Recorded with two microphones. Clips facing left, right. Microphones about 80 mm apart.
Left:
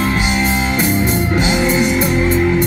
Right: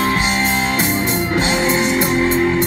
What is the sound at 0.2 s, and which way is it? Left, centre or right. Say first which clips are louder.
Music: left 1 dB; right.